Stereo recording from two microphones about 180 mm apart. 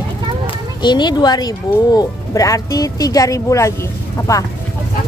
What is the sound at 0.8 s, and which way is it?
Speech, 25° left (ahead or behind).